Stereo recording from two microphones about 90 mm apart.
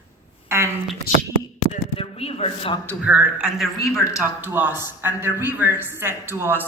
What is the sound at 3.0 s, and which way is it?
Speech, 15° right (ahead or behind).